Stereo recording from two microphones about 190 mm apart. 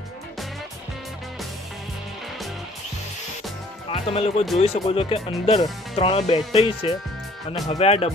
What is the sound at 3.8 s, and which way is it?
Speech, 30° left (ahead or behind).